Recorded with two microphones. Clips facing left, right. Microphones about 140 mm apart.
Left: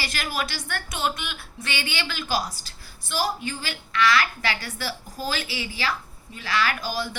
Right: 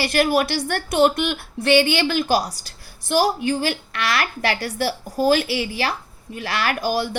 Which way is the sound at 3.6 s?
60° right (ahead or behind).